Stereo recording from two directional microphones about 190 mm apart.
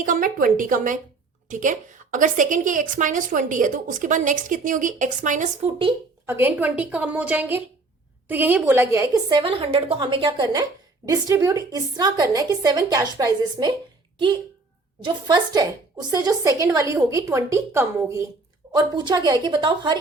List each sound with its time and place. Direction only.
0.0 s a woman's voice: 45° right (ahead or behind)
6.2 s a woman's voice: 10° right (ahead or behind)
9.3 s a woman's voice: 25° right (ahead or behind)
15.0 s a woman's voice: 20° right (ahead or behind)